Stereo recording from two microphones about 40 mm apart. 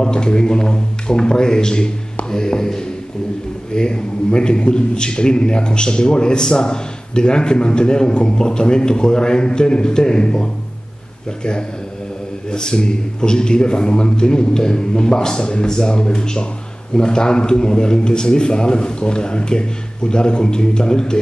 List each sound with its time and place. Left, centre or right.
0.0 s a man's voice: left
12.4 s a man's voice: centre